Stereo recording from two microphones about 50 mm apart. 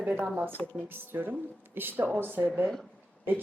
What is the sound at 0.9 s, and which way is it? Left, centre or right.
Speech, right.